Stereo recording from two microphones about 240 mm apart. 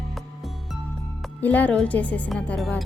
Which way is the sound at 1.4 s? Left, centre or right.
Centre.